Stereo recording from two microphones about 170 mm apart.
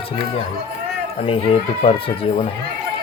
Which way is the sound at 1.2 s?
35° left (ahead or behind).